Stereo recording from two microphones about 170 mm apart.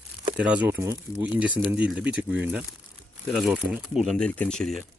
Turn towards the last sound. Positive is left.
turn(degrees=0)  # may be behind; listen again after turning